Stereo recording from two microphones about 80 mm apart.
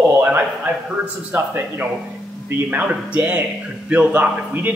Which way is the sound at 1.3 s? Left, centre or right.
Right.